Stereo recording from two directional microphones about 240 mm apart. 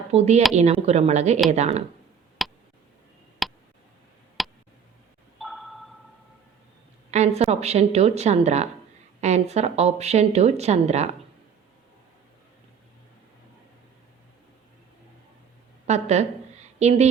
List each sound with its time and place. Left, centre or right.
0.1 s speech: right
2.4 s tick: centre
3.4 s a sound: centre
4.4 s tick: centre
5.4 s a sound: centre
7.1 s speech: right
15.9 s speech: right